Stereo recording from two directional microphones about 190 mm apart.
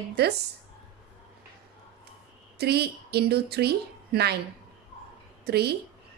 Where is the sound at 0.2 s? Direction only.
55° right (ahead or behind).